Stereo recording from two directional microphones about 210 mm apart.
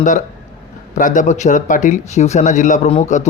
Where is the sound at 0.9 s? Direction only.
35° left (ahead or behind).